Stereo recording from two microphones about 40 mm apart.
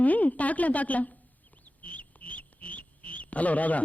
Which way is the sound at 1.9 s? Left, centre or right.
Left.